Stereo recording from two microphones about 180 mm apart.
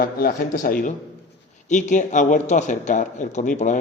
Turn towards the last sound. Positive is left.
turn(degrees=45)  # may be behind; listen again after turning